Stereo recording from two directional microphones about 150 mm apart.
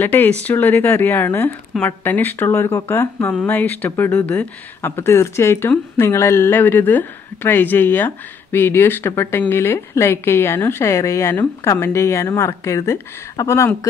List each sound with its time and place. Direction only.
0.0 s speech: 15° left (ahead or behind)